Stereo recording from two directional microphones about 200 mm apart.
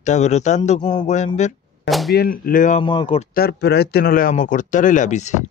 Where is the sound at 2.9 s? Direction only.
25° left (ahead or behind).